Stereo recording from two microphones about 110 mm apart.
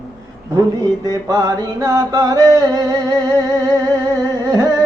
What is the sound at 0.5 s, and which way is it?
Chant, 35° right (ahead or behind).